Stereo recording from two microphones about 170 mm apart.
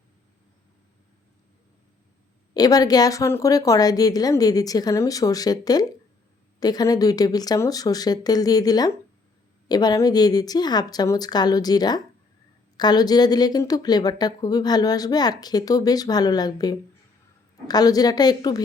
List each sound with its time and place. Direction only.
2.5 s a woman's voice: 20° left (ahead or behind)